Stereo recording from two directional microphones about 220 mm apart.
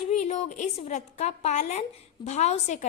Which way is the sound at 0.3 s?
30° left (ahead or behind).